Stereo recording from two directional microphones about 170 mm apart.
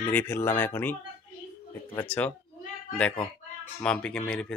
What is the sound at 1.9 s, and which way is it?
Speech, 10° left (ahead or behind).